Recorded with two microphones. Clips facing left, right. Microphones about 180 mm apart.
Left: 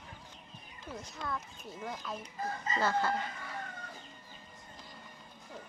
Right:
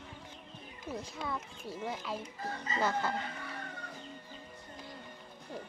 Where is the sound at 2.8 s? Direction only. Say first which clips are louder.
Left 1 dB; 15° right (ahead or behind).